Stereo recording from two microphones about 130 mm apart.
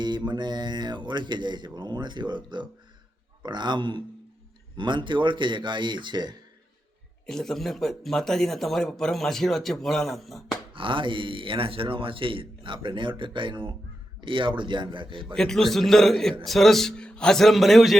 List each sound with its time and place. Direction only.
0.3 s speech: 35° right (ahead or behind)
7.3 s speech: 5° left (ahead or behind)
10.8 s speech: 40° right (ahead or behind)
15.4 s speech: 5° left (ahead or behind)